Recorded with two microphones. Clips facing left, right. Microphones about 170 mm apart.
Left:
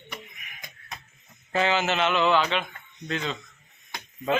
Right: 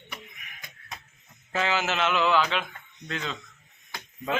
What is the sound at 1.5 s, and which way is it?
Speech, centre (ahead or behind).